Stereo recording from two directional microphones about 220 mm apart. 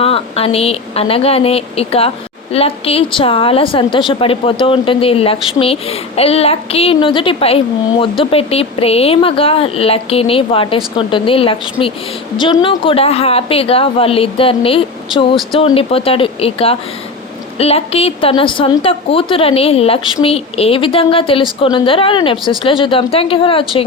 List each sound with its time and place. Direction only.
0.0 s a woman's voice: 25° left (ahead or behind)